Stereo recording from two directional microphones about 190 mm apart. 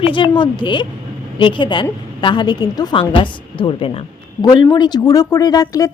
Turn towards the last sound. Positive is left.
turn(degrees=20)  # may be behind; listen again after turning